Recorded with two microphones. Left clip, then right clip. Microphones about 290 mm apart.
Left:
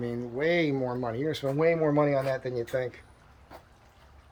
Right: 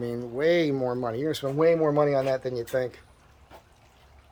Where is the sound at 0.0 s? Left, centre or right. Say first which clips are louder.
Right 3 dB; centre.